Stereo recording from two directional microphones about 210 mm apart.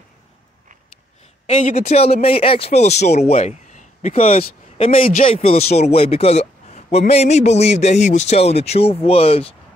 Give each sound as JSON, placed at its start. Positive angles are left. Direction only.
{"t": 1.5, "sound": "a man's voice", "side_deg": 35}